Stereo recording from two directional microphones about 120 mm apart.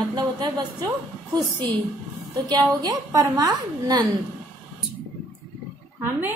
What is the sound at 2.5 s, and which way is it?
A woman's voice, 30° right (ahead or behind).